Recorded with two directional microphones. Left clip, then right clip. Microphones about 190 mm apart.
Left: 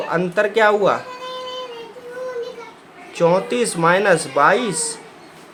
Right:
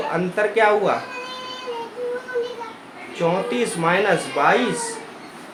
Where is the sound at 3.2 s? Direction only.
30° left (ahead or behind).